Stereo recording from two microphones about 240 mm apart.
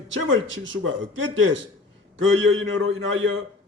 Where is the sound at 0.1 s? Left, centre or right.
Right.